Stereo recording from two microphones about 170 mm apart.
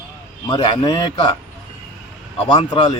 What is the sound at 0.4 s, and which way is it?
Speech, 25° left (ahead or behind).